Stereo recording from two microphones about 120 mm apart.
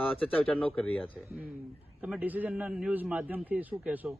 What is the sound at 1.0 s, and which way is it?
A man's voice, 5° right (ahead or behind).